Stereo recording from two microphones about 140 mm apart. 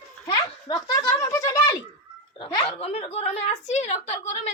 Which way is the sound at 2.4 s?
40° left (ahead or behind).